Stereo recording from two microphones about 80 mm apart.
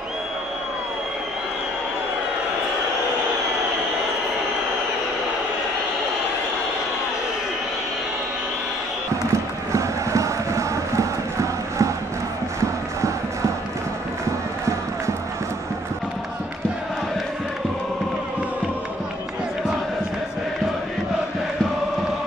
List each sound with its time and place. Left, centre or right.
9.3 s crowd: right